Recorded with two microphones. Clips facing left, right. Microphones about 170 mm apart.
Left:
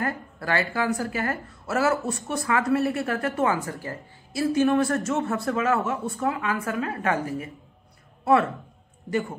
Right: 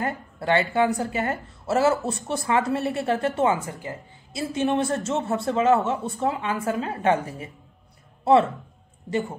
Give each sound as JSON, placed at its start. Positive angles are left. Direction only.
{"t": 0.0, "sound": "a woman's voice", "side_deg": -25}